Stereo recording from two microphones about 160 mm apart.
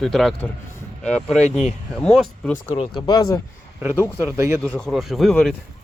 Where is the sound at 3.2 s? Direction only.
20° left (ahead or behind).